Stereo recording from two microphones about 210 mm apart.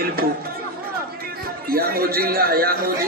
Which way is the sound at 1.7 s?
45° right (ahead or behind).